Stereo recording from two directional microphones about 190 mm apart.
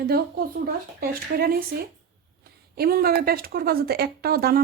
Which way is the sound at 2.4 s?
55° right (ahead or behind).